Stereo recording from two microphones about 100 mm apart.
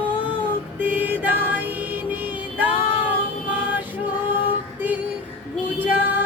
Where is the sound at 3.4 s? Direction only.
15° right (ahead or behind).